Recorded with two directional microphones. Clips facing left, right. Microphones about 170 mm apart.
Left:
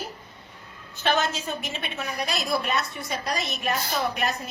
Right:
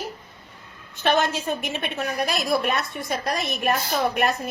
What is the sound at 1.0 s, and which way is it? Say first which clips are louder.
A woman's voice: right 3 dB; 55° right (ahead or behind).